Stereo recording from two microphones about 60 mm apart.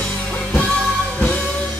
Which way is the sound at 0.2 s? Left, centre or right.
Left.